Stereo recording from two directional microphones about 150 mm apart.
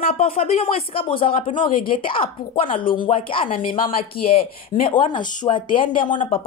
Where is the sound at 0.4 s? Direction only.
45° left (ahead or behind).